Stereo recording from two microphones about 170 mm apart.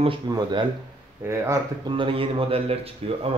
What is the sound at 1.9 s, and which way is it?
A man's voice, 30° right (ahead or behind).